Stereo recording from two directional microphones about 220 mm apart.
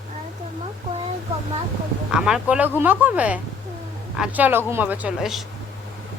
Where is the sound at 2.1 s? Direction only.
5° right (ahead or behind).